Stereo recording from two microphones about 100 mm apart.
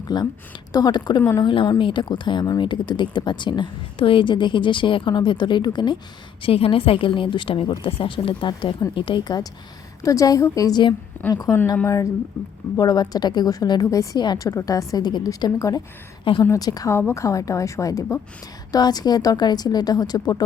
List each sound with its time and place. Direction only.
0.1 s a woman's voice: 45° left (ahead or behind)
6.4 s a woman's voice: 65° left (ahead or behind); by 10.9 s 45° left (ahead or behind)
11.3 s a woman's voice: 30° left (ahead or behind)
16.9 s a woman's voice: 25° left (ahead or behind)